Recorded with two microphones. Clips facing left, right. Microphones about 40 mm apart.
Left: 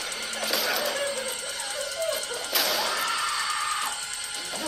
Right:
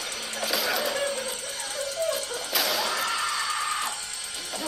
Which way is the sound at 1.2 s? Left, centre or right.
Left.